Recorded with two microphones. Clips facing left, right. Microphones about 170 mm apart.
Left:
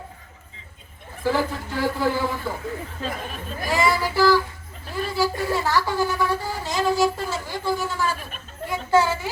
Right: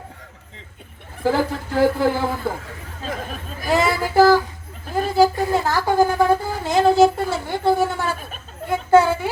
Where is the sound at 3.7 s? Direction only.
55° right (ahead or behind).